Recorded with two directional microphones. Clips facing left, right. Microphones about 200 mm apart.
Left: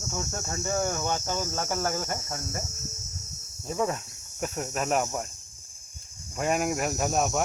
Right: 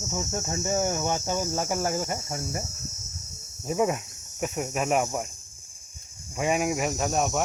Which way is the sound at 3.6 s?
15° right (ahead or behind).